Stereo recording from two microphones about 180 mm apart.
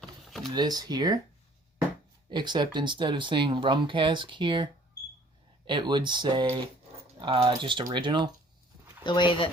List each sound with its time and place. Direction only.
0.3 s a sound: centre (ahead or behind)
0.5 s speech: 20° right (ahead or behind)
2.3 s speech: 25° right (ahead or behind)
9.0 s speech: 25° left (ahead or behind)